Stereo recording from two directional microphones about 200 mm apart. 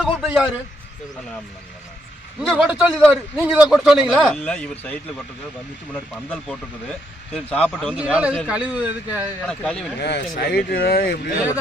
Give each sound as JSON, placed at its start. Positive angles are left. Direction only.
{"t": 0.0, "sound": "a man's voice", "side_deg": -5}
{"t": 2.4, "sound": "a man's voice", "side_deg": -5}
{"t": 9.5, "sound": "a man's voice", "side_deg": 5}
{"t": 10.0, "sound": "speech", "side_deg": 55}